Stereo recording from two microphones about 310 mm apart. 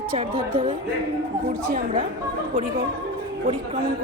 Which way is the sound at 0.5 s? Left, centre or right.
Centre.